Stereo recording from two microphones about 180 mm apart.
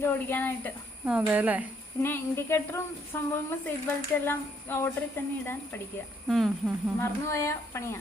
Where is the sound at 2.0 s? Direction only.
15° left (ahead or behind).